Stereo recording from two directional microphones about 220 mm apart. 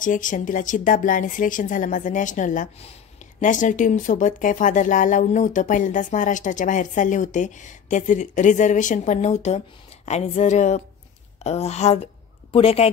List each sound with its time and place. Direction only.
0.0 s speech: 35° left (ahead or behind)